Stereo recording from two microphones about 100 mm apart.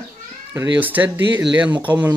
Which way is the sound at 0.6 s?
20° right (ahead or behind).